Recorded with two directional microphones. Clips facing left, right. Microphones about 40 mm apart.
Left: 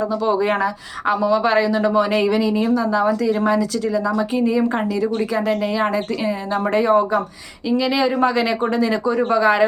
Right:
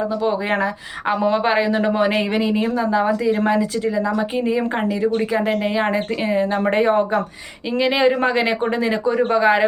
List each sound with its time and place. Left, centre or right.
0.3 s speech: centre
1.2 s speech: right
5.3 s speech: right